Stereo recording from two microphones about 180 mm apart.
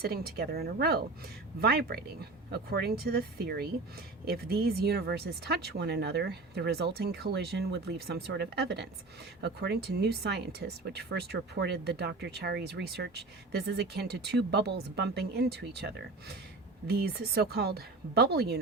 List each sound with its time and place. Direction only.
0.0 s speech: 60° right (ahead or behind)